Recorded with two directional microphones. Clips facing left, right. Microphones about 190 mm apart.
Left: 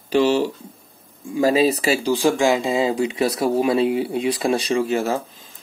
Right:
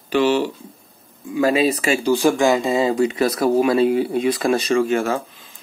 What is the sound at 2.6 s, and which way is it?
Speech, 15° left (ahead or behind).